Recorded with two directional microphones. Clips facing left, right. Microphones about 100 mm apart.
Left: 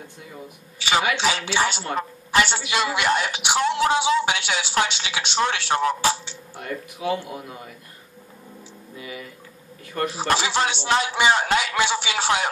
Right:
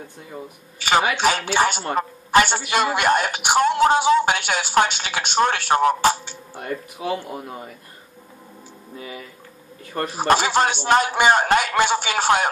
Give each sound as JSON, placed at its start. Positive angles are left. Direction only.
{"t": 0.7, "sound": "a woman's voice", "side_deg": -50}
{"t": 6.6, "sound": "speech", "side_deg": -35}
{"t": 8.9, "sound": "a sound", "side_deg": -35}
{"t": 10.0, "sound": "a woman's voice", "side_deg": -50}